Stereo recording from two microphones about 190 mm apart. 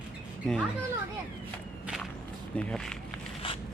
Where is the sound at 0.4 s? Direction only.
5° left (ahead or behind).